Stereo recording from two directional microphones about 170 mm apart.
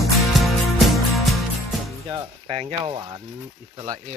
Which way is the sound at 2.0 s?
30° right (ahead or behind).